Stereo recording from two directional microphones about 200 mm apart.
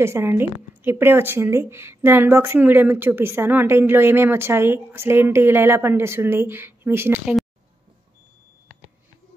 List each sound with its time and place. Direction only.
0.0 s a woman's voice: 10° right (ahead or behind)